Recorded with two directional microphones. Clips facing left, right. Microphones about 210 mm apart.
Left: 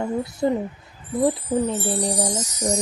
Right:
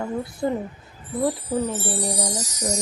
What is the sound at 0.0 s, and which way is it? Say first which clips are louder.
Speech: left 3 dB; 25° left (ahead or behind).